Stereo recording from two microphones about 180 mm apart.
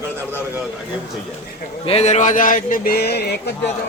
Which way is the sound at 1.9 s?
35° left (ahead or behind).